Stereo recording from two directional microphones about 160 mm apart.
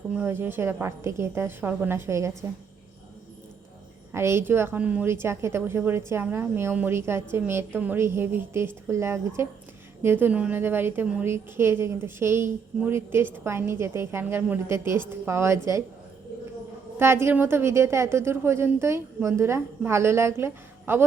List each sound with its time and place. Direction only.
0.1 s a woman's voice: 10° right (ahead or behind)
4.1 s a woman's voice: 15° right (ahead or behind)
17.0 s a woman's voice: 15° right (ahead or behind)